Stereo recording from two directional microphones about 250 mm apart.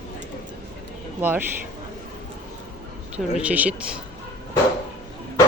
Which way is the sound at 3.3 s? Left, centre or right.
Centre.